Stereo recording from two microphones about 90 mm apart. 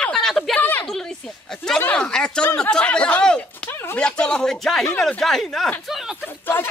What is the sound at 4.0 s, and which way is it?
Speech, 10° left (ahead or behind).